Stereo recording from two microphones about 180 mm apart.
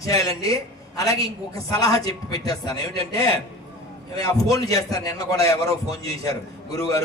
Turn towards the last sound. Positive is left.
turn(degrees=20)  # may be behind; listen again after turning